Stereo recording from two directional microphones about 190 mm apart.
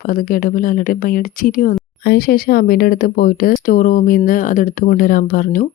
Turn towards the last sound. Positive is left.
turn(degrees=45)  # may be behind; listen again after turning